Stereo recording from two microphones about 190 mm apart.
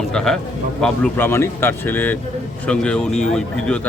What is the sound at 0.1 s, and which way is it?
A man's voice, 5° left (ahead or behind).